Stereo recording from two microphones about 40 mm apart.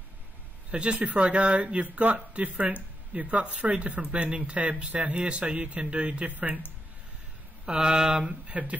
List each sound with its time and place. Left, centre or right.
0.7 s speech: right
7.6 s speech: centre
8.5 s speech: right